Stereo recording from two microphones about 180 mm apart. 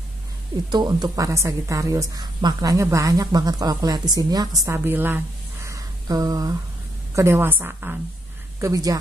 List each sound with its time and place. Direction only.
0.7 s a woman's voice: 25° right (ahead or behind)